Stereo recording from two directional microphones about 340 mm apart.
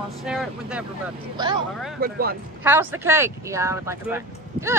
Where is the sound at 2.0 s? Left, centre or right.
Right.